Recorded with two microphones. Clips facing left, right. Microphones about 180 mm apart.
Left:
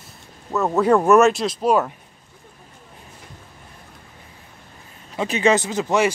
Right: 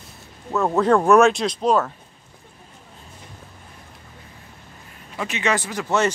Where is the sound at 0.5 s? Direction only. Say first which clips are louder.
Left 1 dB; 5° left (ahead or behind).